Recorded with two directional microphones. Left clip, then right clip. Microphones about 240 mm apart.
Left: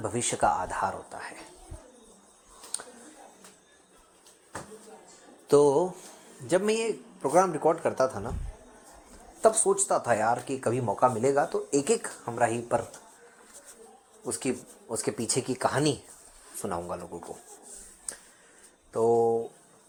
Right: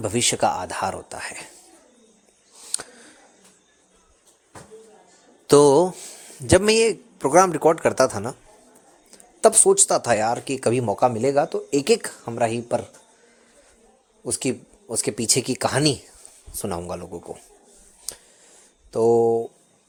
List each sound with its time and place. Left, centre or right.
0.0 s speech: right
2.7 s a sound: right
5.5 s speech: right
9.4 s speech: right
14.3 s speech: right
18.9 s a sound: right